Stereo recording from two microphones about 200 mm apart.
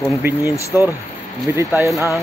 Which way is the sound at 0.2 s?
10° right (ahead or behind).